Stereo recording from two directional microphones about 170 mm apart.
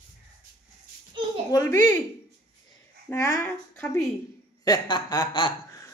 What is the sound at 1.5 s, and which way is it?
Speech, 15° left (ahead or behind).